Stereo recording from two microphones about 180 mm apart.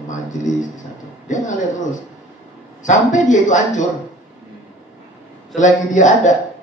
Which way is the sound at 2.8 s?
45° left (ahead or behind).